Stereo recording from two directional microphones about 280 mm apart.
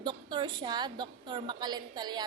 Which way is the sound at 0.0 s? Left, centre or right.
Centre.